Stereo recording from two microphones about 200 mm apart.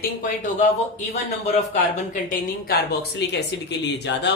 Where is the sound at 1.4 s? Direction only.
35° left (ahead or behind).